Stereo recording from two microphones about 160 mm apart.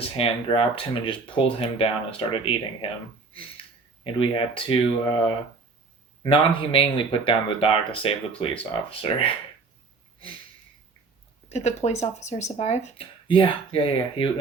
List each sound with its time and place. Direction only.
0.0 s speech: 35° left (ahead or behind)
4.0 s speech: 35° left (ahead or behind)
11.4 s speech: 45° left (ahead or behind)
13.2 s speech: 35° left (ahead or behind)